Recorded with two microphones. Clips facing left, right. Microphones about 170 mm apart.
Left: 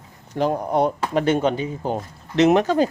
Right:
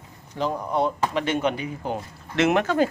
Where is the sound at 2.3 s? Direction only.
20° left (ahead or behind).